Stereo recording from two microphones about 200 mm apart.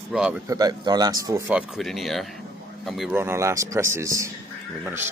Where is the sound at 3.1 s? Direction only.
10° right (ahead or behind).